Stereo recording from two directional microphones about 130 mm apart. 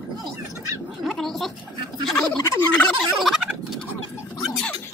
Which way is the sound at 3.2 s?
Centre (ahead or behind).